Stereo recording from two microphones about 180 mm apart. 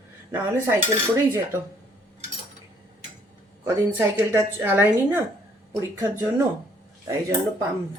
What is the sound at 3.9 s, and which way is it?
Speech, 15° right (ahead or behind).